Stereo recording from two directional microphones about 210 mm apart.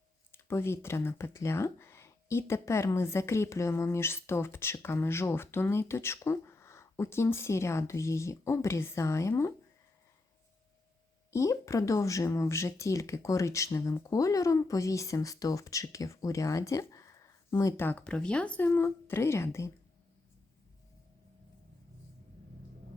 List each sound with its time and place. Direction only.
0.3 s speech: 10° left (ahead or behind)
11.3 s speech: 15° left (ahead or behind)